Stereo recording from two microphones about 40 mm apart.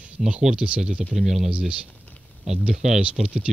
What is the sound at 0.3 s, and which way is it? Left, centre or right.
Speech, centre.